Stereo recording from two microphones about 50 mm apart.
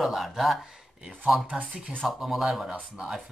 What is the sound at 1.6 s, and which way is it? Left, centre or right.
Speech, right.